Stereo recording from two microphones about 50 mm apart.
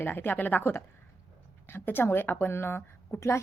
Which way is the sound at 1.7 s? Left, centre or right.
Left.